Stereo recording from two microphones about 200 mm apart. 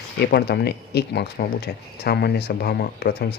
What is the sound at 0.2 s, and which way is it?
Speech, 55° left (ahead or behind).